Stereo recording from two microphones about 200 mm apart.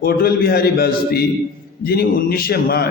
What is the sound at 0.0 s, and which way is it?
A man's voice, 50° left (ahead or behind).